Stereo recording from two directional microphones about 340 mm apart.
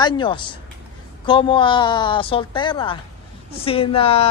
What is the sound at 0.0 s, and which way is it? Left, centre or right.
A woman's voice, centre.